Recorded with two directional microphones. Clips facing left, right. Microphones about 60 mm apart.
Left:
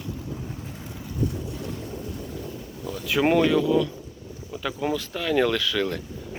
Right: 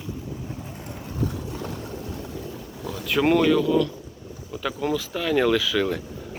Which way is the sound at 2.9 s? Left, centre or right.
Centre.